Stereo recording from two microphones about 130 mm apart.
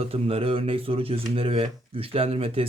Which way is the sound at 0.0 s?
45° right (ahead or behind).